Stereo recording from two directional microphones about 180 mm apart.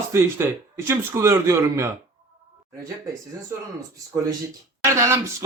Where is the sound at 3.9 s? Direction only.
20° right (ahead or behind).